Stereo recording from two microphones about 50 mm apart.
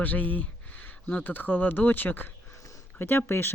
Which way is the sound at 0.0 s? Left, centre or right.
Left.